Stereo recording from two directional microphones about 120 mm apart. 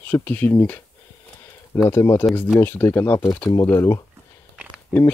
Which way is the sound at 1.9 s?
25° left (ahead or behind).